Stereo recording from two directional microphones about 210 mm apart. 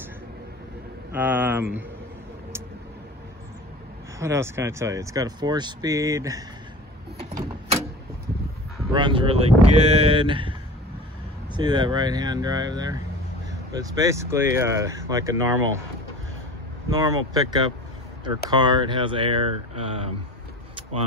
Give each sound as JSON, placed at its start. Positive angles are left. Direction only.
{"t": 1.1, "sound": "speech", "side_deg": -10}
{"t": 4.2, "sound": "speech", "side_deg": -15}
{"t": 7.2, "sound": "a sound", "side_deg": -30}
{"t": 8.9, "sound": "speech", "side_deg": -25}
{"t": 11.5, "sound": "speech", "side_deg": -20}
{"t": 16.9, "sound": "speech", "side_deg": -15}